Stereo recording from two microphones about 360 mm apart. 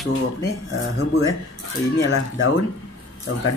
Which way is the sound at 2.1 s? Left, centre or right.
Left.